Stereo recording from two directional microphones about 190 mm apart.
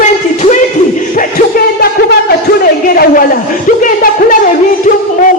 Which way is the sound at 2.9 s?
50° left (ahead or behind).